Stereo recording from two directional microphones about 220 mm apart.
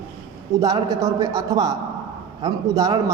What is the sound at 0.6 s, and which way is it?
A man's voice, 15° right (ahead or behind).